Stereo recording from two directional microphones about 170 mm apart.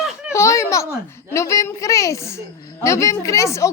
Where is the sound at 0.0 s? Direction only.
5° right (ahead or behind).